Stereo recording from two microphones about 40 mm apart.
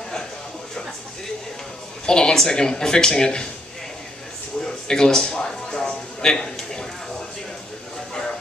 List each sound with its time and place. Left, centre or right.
2.0 s speech: centre
4.6 s music: centre